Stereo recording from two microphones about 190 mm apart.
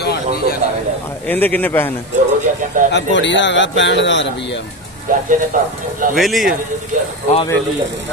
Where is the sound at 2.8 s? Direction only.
45° right (ahead or behind).